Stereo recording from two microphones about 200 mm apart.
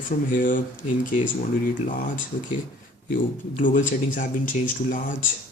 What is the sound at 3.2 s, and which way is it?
Speech, 40° left (ahead or behind).